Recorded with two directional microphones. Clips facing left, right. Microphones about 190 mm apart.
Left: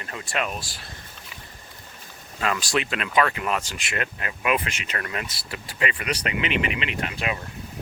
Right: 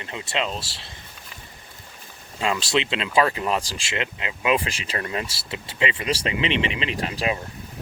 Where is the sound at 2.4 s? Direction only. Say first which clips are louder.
Right 2 dB; 25° right (ahead or behind).